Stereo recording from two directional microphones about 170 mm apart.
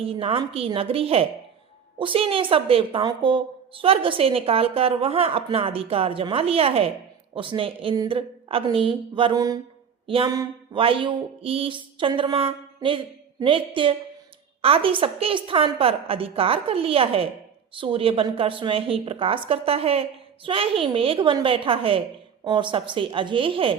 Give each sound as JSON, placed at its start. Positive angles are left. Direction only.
{"t": 0.0, "sound": "a woman's voice", "side_deg": -35}